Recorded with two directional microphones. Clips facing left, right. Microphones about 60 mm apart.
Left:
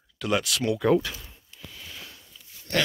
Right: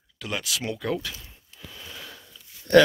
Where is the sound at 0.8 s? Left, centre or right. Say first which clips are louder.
Left 7 dB; left.